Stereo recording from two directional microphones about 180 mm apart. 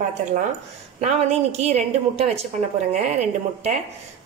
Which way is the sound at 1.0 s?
35° right (ahead or behind).